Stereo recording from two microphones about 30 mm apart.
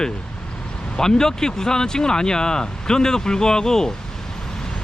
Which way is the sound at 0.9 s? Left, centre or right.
Left.